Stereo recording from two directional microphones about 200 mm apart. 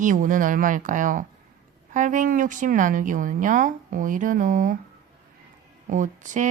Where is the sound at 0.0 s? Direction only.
40° right (ahead or behind).